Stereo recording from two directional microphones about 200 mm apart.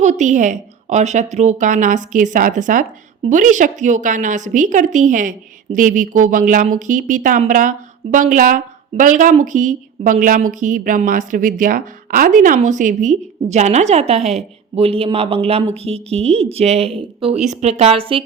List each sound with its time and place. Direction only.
0.0 s a woman's voice: 35° right (ahead or behind)